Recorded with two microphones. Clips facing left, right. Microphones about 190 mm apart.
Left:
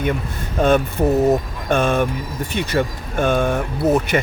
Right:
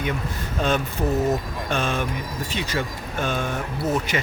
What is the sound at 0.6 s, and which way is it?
Speech, 55° left (ahead or behind).